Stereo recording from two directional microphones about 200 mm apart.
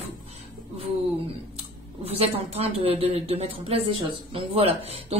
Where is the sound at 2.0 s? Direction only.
30° right (ahead or behind).